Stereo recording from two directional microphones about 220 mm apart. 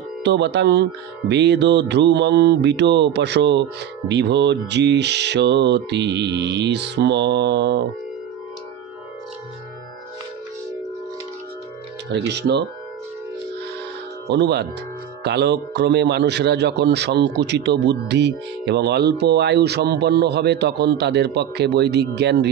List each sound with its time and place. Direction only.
0.2 s a man's voice: 50° right (ahead or behind)
12.1 s a man's voice: 50° right (ahead or behind)
14.2 s a man's voice: 50° right (ahead or behind)